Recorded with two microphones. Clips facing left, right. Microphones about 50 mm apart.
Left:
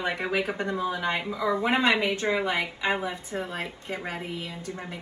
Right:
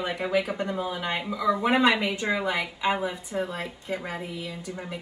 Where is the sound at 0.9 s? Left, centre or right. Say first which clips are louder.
Left 1 dB; left.